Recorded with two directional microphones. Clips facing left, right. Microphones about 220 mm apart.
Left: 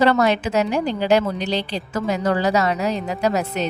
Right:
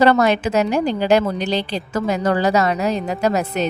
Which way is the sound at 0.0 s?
45° right (ahead or behind).